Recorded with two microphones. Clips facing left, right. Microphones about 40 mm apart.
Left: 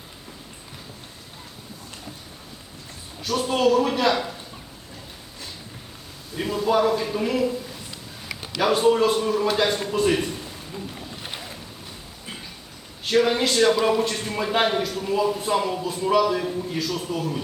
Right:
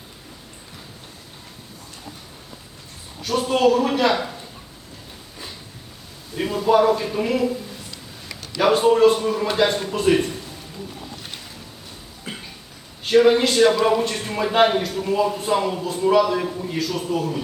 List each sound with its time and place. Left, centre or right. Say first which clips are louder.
3.2 s a man's voice: right 3 dB; centre
6.3 s speech: right 4 dB; centre
8.5 s a man's voice: right 3 dB; centre
11.2 s boat: left 2 dB; centre
13.1 s a man's voice: right 5 dB; centre
16.7 s a man's voice: right 3 dB; centre